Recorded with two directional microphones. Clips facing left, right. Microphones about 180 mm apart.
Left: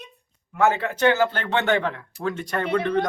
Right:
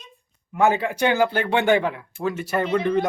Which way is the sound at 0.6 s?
15° right (ahead or behind).